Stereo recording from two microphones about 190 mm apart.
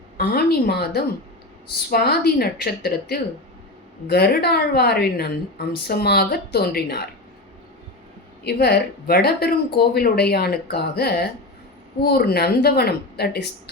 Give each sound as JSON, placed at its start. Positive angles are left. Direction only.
{"t": 0.2, "sound": "a woman's voice", "side_deg": 55}
{"t": 8.4, "sound": "a woman's voice", "side_deg": 60}